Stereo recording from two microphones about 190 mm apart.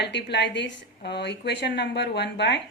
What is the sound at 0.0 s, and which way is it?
Speech, 65° left (ahead or behind).